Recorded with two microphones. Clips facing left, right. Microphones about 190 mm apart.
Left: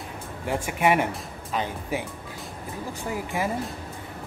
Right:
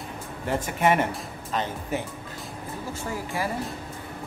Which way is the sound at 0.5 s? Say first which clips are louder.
Even; 10° left (ahead or behind).